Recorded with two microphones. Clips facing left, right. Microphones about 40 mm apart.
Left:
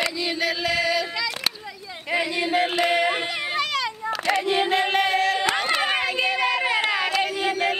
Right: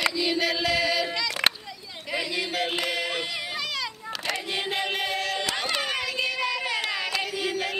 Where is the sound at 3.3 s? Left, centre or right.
Left.